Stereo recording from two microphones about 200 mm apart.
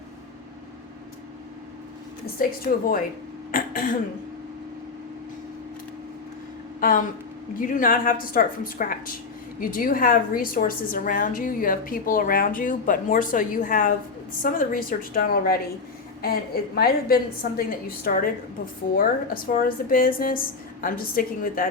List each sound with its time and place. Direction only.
2.4 s a woman's voice: 45° left (ahead or behind)
3.5 s throat clearing: 45° left (ahead or behind)
6.7 s a sound: 45° left (ahead or behind)
7.5 s a woman's voice: 45° left (ahead or behind)